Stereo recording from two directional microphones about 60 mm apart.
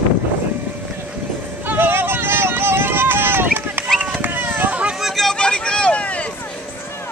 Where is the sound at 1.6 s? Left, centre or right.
Right.